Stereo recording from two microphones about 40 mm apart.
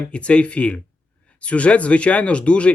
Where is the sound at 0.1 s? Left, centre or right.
Left.